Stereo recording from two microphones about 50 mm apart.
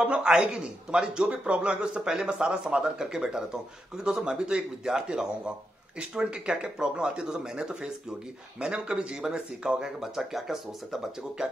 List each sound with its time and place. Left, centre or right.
0.0 s a man's voice: right
0.3 s speech: centre